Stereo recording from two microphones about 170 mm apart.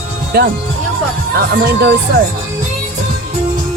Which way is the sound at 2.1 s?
65° right (ahead or behind).